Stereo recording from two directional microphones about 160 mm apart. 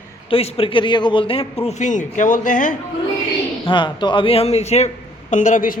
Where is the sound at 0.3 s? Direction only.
35° left (ahead or behind); by 2.7 s 55° left (ahead or behind).